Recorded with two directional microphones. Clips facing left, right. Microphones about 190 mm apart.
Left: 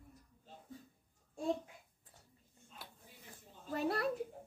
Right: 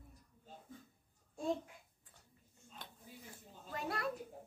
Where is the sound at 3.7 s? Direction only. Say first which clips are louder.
Left 5 dB; 30° left (ahead or behind).